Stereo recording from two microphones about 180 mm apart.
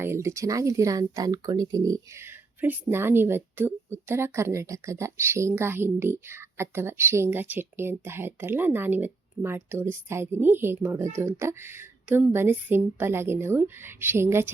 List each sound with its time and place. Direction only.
0.0 s speech: 15° right (ahead or behind)